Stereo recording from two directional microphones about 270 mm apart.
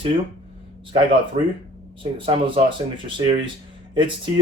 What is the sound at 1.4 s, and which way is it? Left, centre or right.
Speech, right.